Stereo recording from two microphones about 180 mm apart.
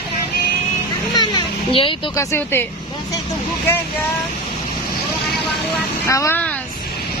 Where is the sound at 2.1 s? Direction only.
15° left (ahead or behind).